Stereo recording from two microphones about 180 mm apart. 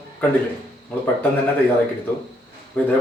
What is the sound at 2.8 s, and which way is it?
Speech, 10° left (ahead or behind).